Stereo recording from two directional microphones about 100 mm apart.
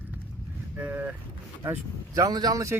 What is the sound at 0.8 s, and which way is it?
Speech, 15° right (ahead or behind).